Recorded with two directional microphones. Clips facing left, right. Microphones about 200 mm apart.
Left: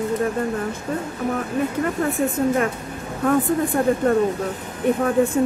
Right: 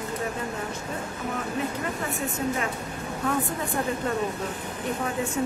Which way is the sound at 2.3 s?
50° left (ahead or behind).